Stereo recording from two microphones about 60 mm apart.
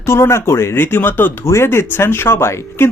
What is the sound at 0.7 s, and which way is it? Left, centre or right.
Speech, left.